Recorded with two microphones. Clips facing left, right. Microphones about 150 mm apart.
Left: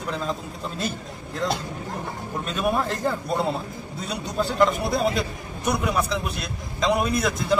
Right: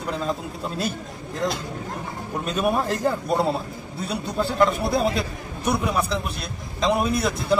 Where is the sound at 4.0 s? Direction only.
30° right (ahead or behind).